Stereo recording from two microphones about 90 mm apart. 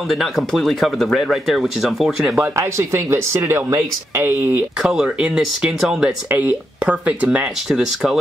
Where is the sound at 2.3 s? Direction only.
30° right (ahead or behind).